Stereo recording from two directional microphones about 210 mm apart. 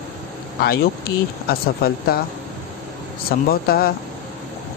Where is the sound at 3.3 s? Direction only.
45° left (ahead or behind).